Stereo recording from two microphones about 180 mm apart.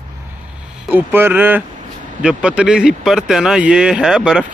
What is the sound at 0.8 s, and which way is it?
Speech, 10° right (ahead or behind).